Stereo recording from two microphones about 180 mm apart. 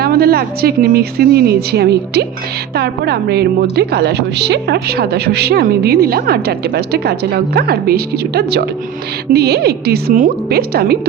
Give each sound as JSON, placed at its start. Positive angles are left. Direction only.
{"t": 0.0, "sound": "a woman's voice", "side_deg": -60}